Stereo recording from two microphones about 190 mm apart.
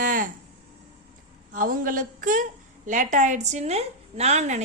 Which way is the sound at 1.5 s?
45° right (ahead or behind).